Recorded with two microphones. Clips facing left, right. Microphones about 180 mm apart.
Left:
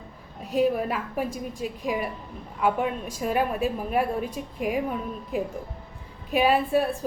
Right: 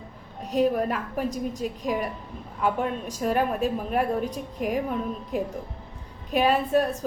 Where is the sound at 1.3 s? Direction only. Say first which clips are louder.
Right 3 dB; 40° right (ahead or behind).